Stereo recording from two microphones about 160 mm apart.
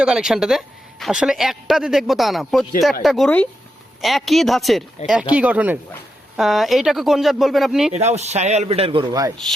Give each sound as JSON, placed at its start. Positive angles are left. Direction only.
{"t": 0.0, "sound": "speech", "side_deg": -5}
{"t": 7.9, "sound": "a man's voice", "side_deg": -45}